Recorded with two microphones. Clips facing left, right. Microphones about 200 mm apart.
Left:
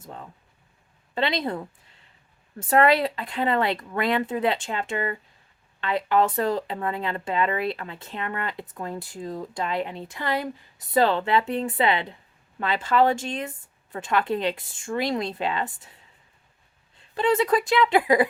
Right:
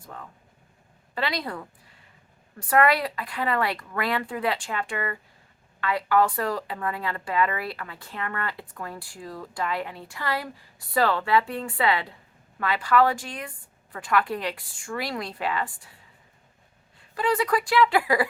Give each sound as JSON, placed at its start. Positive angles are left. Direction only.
{"t": 0.0, "sound": "speech", "side_deg": 20}
{"t": 17.0, "sound": "speech", "side_deg": 25}